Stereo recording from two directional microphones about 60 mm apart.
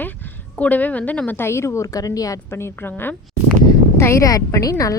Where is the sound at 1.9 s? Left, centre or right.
Left.